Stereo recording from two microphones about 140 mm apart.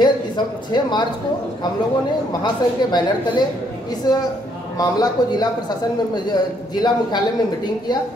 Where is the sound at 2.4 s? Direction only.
30° left (ahead or behind).